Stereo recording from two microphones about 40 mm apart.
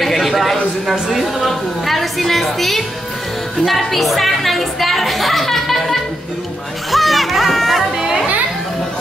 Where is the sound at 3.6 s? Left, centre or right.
Centre.